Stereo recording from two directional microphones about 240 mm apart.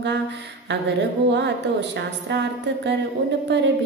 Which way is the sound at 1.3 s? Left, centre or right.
Right.